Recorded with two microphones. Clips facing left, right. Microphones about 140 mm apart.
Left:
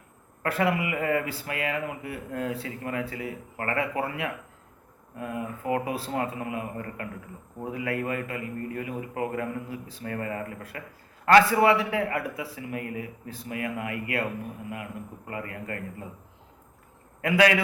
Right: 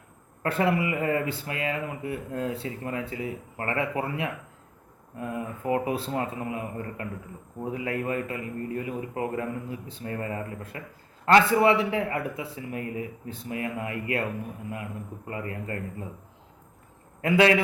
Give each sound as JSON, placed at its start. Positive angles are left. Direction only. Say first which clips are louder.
{"t": 0.4, "sound": "speech", "louder": "right 1 dB", "side_deg": -30}
{"t": 15.3, "sound": "speech", "louder": "right 2 dB", "side_deg": -30}
{"t": 17.2, "sound": "speech", "louder": "right 1 dB", "side_deg": -25}